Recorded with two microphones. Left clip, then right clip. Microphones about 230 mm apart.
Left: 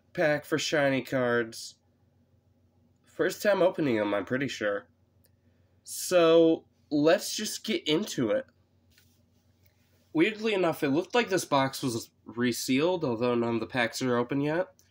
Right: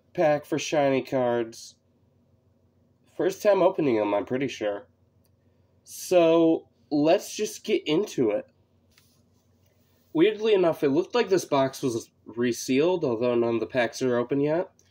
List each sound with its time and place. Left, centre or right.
0.1 s speech: left
3.1 s speech: left
5.9 s speech: left
10.1 s speech: left